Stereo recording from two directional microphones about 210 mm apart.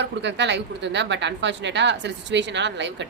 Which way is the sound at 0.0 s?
55° right (ahead or behind).